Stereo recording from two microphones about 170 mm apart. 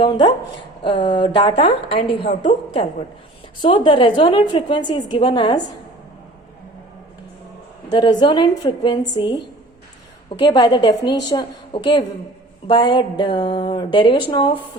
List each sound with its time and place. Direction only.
0.0 s a woman's voice: 25° left (ahead or behind)
2.3 s a woman's voice: 45° left (ahead or behind)
3.6 s a woman's voice: 30° left (ahead or behind)
7.9 s a woman's voice: 25° left (ahead or behind)